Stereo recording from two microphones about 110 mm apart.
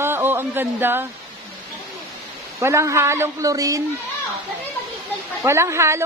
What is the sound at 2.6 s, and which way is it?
A woman's voice, 25° right (ahead or behind).